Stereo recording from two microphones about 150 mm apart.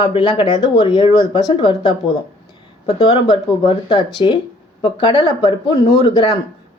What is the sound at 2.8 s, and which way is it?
Speech, 45° left (ahead or behind).